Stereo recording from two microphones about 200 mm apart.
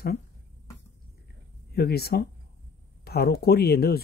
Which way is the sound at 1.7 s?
50° left (ahead or behind).